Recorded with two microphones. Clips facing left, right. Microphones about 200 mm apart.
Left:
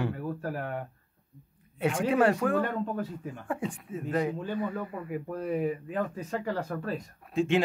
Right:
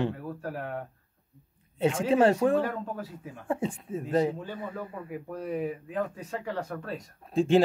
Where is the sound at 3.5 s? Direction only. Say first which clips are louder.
Right 4 dB; 25° right (ahead or behind).